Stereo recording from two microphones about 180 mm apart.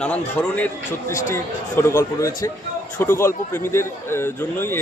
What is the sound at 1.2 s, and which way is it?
A man's voice, 15° left (ahead or behind).